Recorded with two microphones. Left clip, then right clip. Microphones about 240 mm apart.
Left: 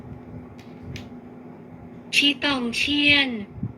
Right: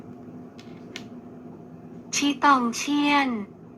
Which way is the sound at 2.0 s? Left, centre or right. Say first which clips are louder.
Even; right.